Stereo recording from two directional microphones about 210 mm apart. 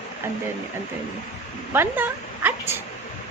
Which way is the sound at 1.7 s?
10° right (ahead or behind).